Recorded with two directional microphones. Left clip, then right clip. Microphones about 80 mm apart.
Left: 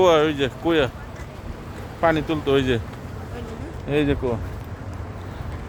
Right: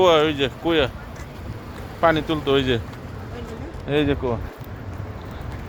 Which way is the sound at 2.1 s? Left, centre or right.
Left.